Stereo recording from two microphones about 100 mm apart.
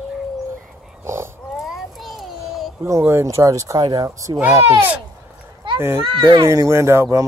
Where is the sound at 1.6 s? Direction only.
Centre (ahead or behind).